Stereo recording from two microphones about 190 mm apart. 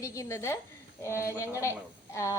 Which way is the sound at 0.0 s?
15° left (ahead or behind).